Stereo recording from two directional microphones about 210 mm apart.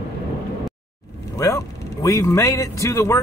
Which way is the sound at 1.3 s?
15° left (ahead or behind).